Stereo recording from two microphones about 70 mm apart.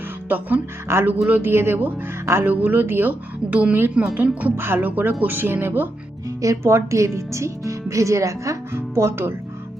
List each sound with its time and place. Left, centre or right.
0.3 s speech: right
0.9 s speech: right
4.5 s speech: right
6.4 s speech: right